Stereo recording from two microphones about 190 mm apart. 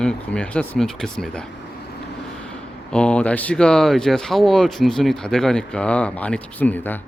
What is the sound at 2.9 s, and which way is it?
Speech, 5° left (ahead or behind).